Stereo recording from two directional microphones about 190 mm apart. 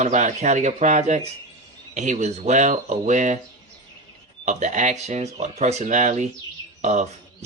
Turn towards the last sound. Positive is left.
turn(degrees=-40)  # may be behind; listen again after turning